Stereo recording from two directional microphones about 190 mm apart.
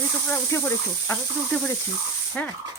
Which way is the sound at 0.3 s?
10° left (ahead or behind).